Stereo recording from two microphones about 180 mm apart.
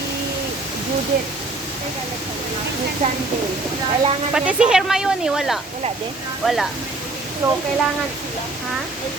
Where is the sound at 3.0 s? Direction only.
35° right (ahead or behind).